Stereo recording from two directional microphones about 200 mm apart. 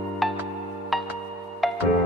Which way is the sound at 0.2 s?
Centre (ahead or behind).